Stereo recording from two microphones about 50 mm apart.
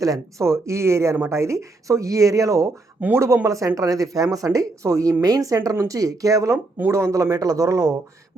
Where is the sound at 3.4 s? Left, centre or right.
Right.